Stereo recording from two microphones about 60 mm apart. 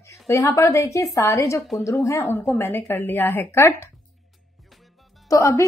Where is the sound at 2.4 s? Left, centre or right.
Left.